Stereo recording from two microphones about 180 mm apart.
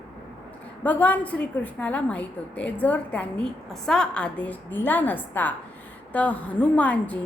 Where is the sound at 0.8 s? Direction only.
10° left (ahead or behind).